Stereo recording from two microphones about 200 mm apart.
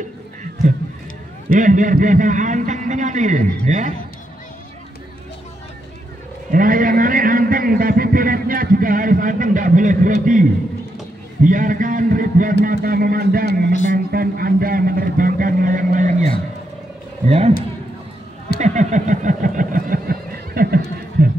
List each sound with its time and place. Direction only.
1.5 s a man's voice: 40° right (ahead or behind)
6.5 s a man's voice: 45° right (ahead or behind)
17.3 s a man's voice: 35° right (ahead or behind)
18.6 s a sound: 35° right (ahead or behind)